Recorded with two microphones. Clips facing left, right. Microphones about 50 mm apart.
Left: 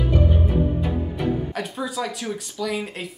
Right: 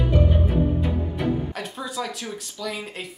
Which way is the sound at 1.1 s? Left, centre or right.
Centre.